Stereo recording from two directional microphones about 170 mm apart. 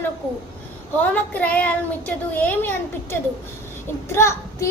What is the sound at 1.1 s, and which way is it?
A child's voice, 10° left (ahead or behind).